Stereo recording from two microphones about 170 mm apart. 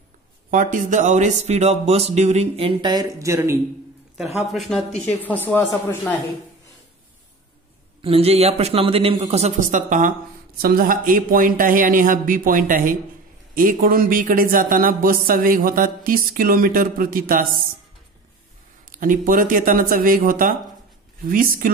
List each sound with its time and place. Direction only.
0.5 s speech: 50° right (ahead or behind); by 3.5 s 15° right (ahead or behind)
4.5 s speech: centre (ahead or behind)
8.0 s speech: 35° right (ahead or behind); by 17.6 s 55° right (ahead or behind)
18.9 s speech: 50° right (ahead or behind)